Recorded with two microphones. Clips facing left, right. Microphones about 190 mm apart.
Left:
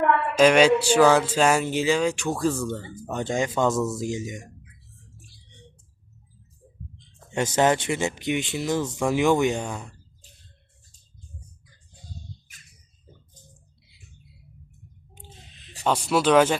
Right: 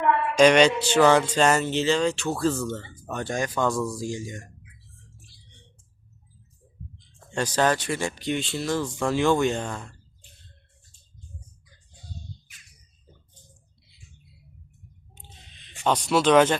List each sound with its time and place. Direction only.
0.3 s speech: 5° left (ahead or behind)
7.3 s speech: 20° left (ahead or behind)
15.1 s a sound: 10° left (ahead or behind)
15.8 s speech: 10° left (ahead or behind)